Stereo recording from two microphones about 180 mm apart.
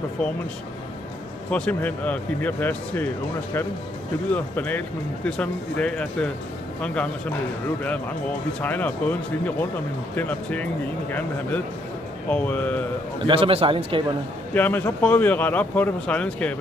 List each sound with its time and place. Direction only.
0.2 s speech: 5° left (ahead or behind)
1.5 s speech: 10° left (ahead or behind)
4.3 s speech: 10° left (ahead or behind)
8.5 s speech: 10° left (ahead or behind)
10.1 s speech: 10° left (ahead or behind)
13.2 s speech: 30° right (ahead or behind)
14.5 s speech: 10° left (ahead or behind)